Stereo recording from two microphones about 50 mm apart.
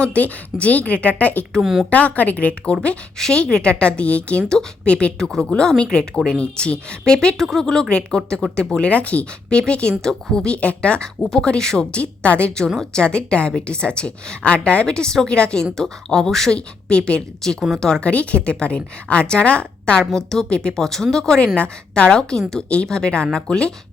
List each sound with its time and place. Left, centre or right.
0.0 s a woman's voice: left
1.6 s a woman's voice: centre
1.9 s a woman's voice: left
3.2 s a woman's voice: centre; by 12.5 s left
12.7 s a woman's voice: centre
18.0 s a woman's voice: left
20.0 s a woman's voice: centre